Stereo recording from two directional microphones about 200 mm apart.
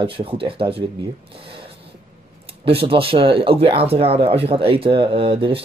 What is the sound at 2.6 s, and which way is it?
Speech, 30° right (ahead or behind).